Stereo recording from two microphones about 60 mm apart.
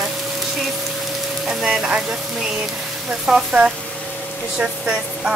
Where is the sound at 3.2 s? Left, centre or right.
Centre.